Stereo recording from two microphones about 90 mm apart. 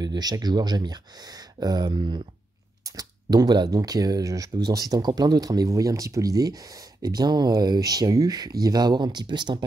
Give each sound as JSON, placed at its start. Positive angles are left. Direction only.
{"t": 0.0, "sound": "speech", "side_deg": -50}
{"t": 1.9, "sound": "speech", "side_deg": -65}
{"t": 2.8, "sound": "speech", "side_deg": -45}